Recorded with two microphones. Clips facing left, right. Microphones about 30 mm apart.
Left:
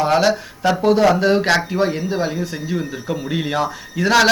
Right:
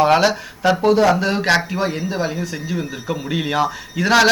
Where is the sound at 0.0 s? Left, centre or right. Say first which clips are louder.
Right 2 dB; centre.